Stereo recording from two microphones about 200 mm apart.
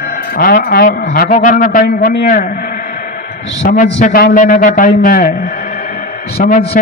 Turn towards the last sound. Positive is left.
turn(degrees=35)  # may be behind; listen again after turning